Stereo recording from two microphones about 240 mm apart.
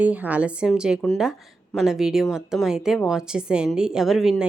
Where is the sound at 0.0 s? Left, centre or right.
Centre.